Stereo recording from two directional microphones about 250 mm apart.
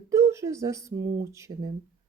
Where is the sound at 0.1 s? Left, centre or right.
Centre.